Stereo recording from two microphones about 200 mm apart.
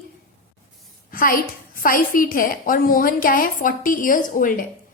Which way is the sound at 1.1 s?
45° left (ahead or behind).